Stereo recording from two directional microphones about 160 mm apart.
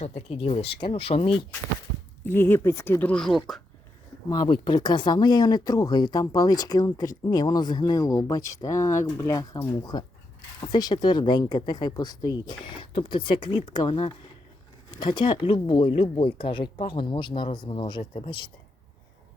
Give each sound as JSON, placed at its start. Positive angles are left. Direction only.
{"t": 0.0, "sound": "speech", "side_deg": 40}
{"t": 2.2, "sound": "speech", "side_deg": 15}
{"t": 4.3, "sound": "speech", "side_deg": 30}